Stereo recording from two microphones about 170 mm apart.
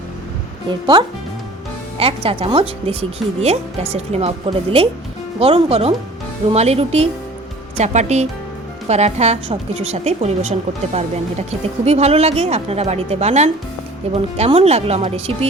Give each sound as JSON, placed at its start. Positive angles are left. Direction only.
{"t": 0.7, "sound": "speech", "side_deg": -25}